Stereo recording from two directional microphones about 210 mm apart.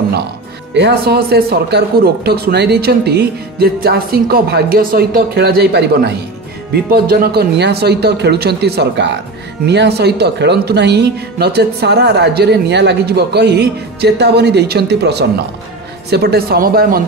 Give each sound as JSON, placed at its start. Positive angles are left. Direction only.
{"t": 0.7, "sound": "speech", "side_deg": -50}